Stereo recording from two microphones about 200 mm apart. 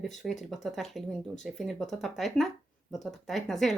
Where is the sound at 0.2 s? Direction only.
Centre (ahead or behind).